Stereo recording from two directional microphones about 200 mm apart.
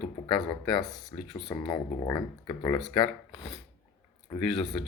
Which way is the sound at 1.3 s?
20° left (ahead or behind).